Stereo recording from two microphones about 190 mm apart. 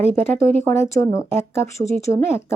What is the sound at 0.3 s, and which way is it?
Speech, 15° left (ahead or behind).